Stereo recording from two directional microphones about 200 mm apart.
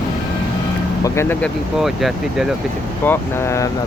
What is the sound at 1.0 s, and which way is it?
Speech, 10° left (ahead or behind).